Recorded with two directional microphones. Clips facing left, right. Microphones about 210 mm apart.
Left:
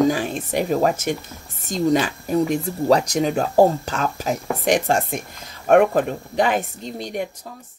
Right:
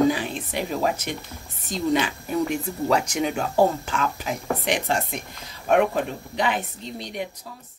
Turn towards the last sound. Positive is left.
turn(degrees=45)  # may be behind; listen again after turning